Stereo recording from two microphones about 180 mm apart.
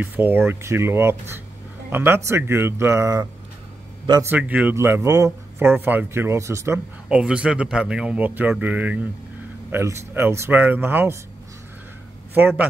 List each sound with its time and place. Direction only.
0.0 s a man's voice: 10° right (ahead or behind)
4.3 s speech: 10° right (ahead or behind)
12.4 s speech: 10° right (ahead or behind)